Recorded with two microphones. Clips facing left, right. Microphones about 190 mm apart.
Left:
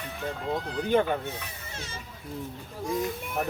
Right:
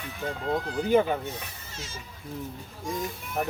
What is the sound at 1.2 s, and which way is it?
Speech, 60° left (ahead or behind).